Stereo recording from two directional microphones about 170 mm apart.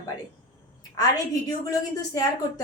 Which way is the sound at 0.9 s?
20° left (ahead or behind).